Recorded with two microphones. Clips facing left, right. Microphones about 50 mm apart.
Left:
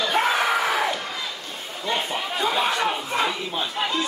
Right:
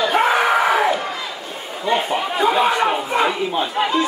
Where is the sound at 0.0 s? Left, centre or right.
Centre.